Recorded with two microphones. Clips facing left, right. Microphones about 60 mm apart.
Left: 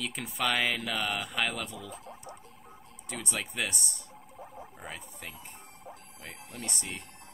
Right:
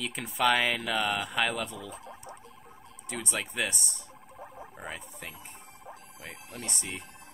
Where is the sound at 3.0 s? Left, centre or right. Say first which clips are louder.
Right 2 dB; centre.